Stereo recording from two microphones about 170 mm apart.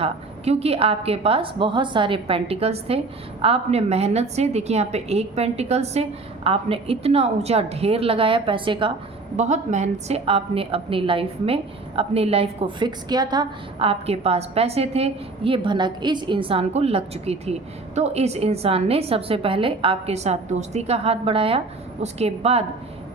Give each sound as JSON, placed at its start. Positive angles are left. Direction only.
{"t": 0.0, "sound": "a woman's voice", "side_deg": -35}
{"t": 9.3, "sound": "a woman's voice", "side_deg": -45}